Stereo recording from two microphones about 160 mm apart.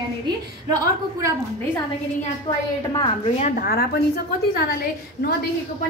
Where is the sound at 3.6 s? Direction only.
75° left (ahead or behind).